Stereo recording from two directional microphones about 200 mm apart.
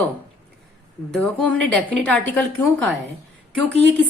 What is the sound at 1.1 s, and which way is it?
A woman's voice, 5° left (ahead or behind).